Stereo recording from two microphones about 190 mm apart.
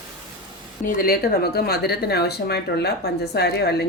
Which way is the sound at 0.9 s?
50° left (ahead or behind).